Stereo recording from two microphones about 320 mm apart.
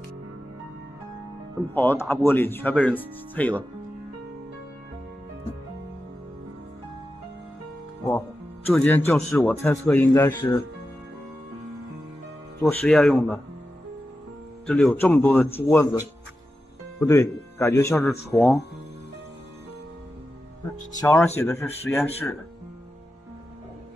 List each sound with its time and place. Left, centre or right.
1.7 s speech: centre
8.6 s speech: centre
12.6 s speech: centre
14.7 s speech: centre
17.0 s speech: centre
21.0 s speech: centre